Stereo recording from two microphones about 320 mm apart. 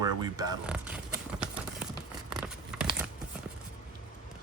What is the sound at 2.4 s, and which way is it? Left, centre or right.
Crumpling, centre.